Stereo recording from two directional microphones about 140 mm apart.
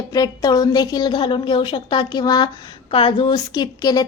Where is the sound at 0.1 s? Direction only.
25° left (ahead or behind).